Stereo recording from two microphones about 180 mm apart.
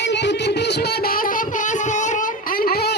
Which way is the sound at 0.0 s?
75° left (ahead or behind).